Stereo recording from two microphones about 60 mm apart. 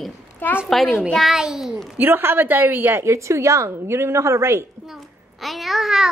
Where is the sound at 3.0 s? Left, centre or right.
Right.